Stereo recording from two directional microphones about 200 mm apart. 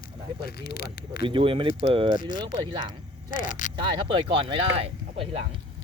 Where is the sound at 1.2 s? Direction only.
25° right (ahead or behind).